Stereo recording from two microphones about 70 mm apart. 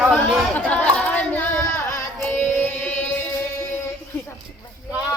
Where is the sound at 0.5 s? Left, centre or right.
Left.